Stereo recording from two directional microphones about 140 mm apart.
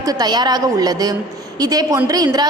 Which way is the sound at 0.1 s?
30° right (ahead or behind).